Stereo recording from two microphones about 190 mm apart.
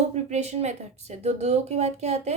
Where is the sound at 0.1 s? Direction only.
35° right (ahead or behind).